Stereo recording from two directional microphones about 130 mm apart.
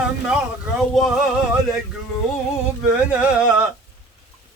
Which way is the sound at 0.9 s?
Centre (ahead or behind).